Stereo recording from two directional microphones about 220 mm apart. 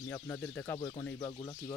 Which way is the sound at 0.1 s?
10° left (ahead or behind).